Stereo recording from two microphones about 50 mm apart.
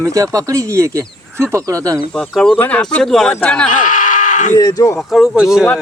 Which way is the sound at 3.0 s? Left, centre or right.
Centre.